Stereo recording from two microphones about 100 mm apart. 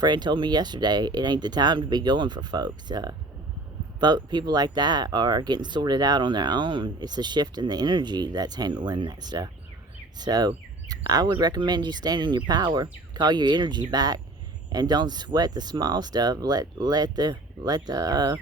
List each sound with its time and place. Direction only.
0.0 s speech: 45° right (ahead or behind)